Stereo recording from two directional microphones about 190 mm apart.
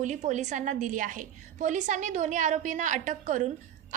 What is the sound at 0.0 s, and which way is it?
A woman's voice, 40° right (ahead or behind).